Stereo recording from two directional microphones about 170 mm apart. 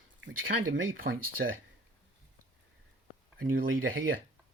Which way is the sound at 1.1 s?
75° right (ahead or behind).